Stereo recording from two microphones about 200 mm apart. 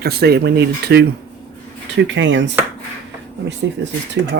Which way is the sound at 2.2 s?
65° right (ahead or behind).